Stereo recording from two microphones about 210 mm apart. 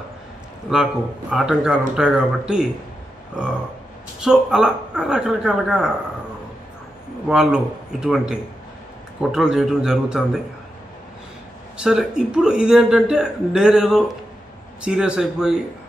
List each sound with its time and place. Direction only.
0.7 s a man's voice: 5° right (ahead or behind)
4.2 s a man's voice: 5° right (ahead or behind)
7.2 s a man's voice: 5° right (ahead or behind)
11.7 s a man's voice: 5° right (ahead or behind)